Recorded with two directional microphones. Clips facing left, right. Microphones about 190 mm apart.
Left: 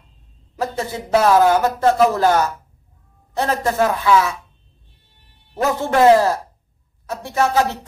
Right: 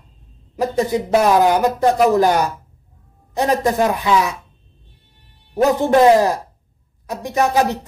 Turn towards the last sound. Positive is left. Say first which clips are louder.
# right 1 dB
turn(degrees=-15)  # may be behind; listen again after turning